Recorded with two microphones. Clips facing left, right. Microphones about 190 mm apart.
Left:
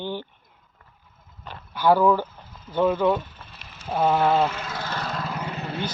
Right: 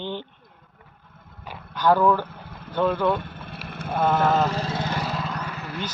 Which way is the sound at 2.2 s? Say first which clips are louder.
Right 2 dB; 65° right (ahead or behind).